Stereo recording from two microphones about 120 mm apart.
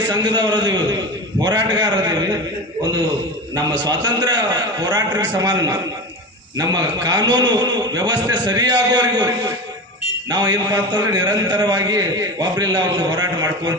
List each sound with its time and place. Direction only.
0.1 s a man's voice: 35° right (ahead or behind)
1.4 s a sound: 35° right (ahead or behind)
3.5 s a man's voice: 35° right (ahead or behind)